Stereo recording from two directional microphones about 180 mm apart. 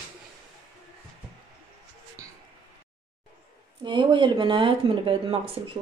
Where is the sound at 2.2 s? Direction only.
20° right (ahead or behind).